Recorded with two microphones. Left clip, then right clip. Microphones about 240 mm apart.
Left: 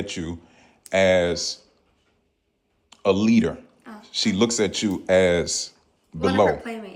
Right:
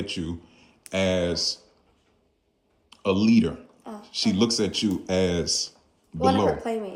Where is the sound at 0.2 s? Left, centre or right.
Centre.